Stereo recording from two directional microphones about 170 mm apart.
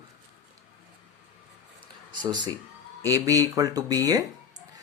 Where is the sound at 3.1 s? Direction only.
20° right (ahead or behind).